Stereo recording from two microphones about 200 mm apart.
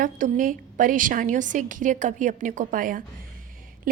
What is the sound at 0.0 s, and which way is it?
A woman's voice, 40° right (ahead or behind).